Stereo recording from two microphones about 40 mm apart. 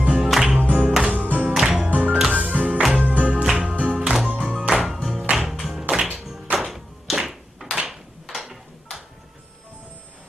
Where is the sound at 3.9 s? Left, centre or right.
Right.